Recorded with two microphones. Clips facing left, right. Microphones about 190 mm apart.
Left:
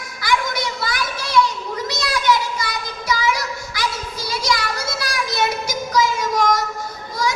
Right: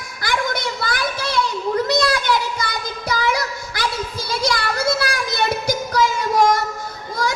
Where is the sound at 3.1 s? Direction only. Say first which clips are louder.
Even; 55° right (ahead or behind).